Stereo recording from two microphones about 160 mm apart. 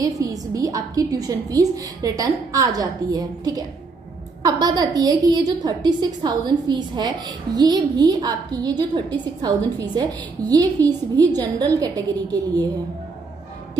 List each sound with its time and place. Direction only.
0.3 s a woman's voice: 20° right (ahead or behind)